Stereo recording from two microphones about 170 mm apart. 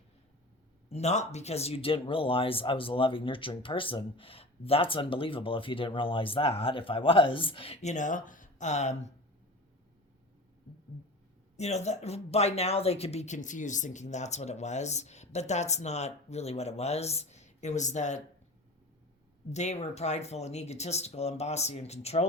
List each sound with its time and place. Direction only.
0.9 s speech: 40° left (ahead or behind)
11.5 s speech: 40° left (ahead or behind)
19.5 s speech: 40° left (ahead or behind)